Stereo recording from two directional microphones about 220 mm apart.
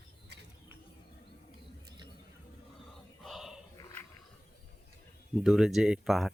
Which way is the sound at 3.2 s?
Centre (ahead or behind).